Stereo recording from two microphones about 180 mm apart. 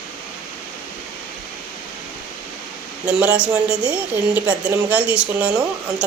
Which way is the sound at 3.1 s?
5° right (ahead or behind).